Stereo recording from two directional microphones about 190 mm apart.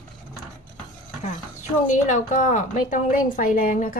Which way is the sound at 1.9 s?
40° left (ahead or behind).